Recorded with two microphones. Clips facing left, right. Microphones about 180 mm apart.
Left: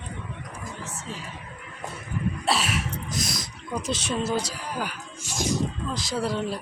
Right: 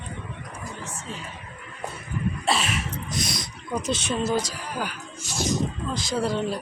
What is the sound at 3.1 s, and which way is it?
Speech, centre (ahead or behind).